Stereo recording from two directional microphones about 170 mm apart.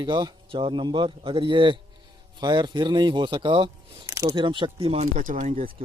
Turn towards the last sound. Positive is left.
turn(degrees=-50)  # may be behind; listen again after turning